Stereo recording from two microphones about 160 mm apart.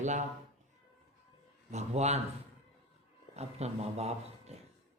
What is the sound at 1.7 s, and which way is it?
Speech, 45° right (ahead or behind).